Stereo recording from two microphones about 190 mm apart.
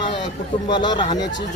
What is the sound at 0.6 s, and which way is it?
Speech, 20° left (ahead or behind).